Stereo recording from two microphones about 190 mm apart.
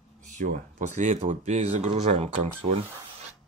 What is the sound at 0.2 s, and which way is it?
Speech, 40° right (ahead or behind).